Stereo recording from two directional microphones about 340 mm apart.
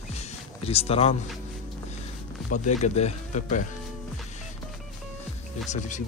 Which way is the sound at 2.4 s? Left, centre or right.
Left.